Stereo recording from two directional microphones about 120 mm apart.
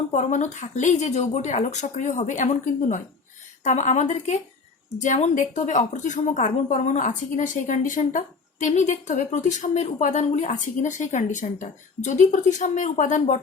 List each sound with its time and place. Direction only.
0.1 s a woman's voice: 90° left
4.9 s a woman's voice: 90° left